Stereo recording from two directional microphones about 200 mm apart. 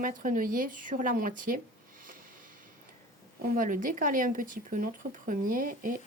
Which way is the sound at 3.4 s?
40° right (ahead or behind).